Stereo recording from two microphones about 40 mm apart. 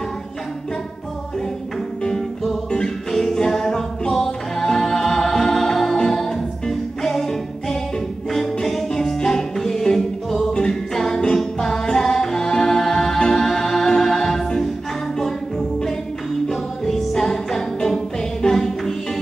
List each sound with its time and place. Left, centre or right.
3.1 s a capella: centre
4.1 s music: centre
8.6 s music: centre
16.4 s music: centre